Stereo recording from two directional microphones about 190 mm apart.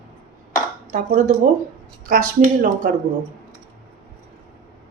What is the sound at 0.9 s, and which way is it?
Speech, 40° right (ahead or behind).